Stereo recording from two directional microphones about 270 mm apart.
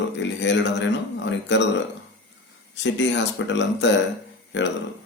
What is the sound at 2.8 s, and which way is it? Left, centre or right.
Speech, left.